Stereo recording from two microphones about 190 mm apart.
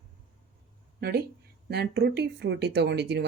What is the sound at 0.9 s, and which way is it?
Speech, 55° right (ahead or behind).